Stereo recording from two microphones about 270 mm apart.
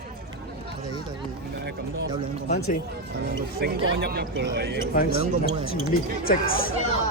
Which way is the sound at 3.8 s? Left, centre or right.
Right.